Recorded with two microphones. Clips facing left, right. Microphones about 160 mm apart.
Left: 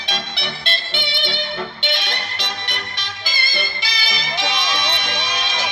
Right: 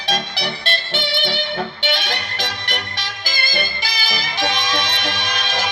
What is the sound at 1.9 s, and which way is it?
Music, 45° right (ahead or behind).